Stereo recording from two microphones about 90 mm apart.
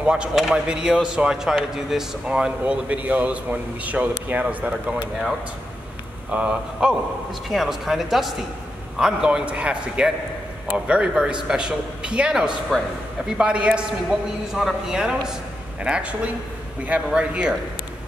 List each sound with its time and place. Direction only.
0.0 s speech: 10° right (ahead or behind)
6.3 s speech: 10° right (ahead or behind)